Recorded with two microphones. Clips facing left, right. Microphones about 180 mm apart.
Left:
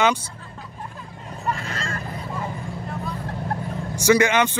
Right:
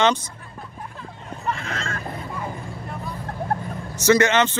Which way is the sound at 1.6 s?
35° left (ahead or behind).